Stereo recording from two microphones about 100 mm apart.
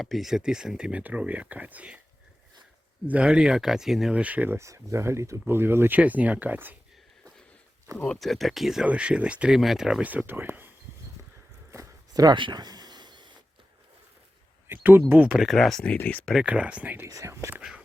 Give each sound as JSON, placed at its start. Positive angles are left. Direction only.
{"t": 0.0, "sound": "speech", "side_deg": 0}
{"t": 3.1, "sound": "speech", "side_deg": -10}
{"t": 4.5, "sound": "speech", "side_deg": -30}
{"t": 8.0, "sound": "speech", "side_deg": 5}
{"t": 10.1, "sound": "speech", "side_deg": -20}
{"t": 11.7, "sound": "a sound", "side_deg": -35}
{"t": 14.7, "sound": "speech", "side_deg": -20}
{"t": 16.0, "sound": "speech", "side_deg": 15}
{"t": 16.2, "sound": "speech", "side_deg": -5}
{"t": 17.1, "sound": "speech", "side_deg": -30}